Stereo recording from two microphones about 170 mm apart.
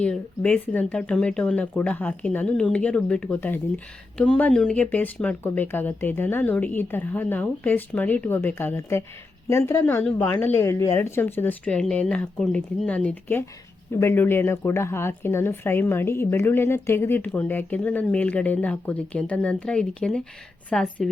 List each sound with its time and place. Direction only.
0.0 s a woman's voice: 5° left (ahead or behind)